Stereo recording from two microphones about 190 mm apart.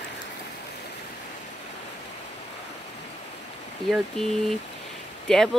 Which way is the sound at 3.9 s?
Centre (ahead or behind).